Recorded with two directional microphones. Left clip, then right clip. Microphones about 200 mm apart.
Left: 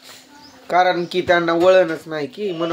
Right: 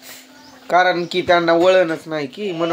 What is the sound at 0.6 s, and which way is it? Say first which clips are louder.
Speech: right 1 dB; 20° right (ahead or behind).